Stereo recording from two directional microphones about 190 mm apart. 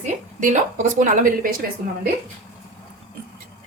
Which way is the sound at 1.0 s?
45° right (ahead or behind).